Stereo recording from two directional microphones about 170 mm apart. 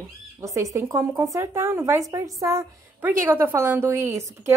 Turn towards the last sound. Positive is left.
turn(degrees=-15)  # may be behind; listen again after turning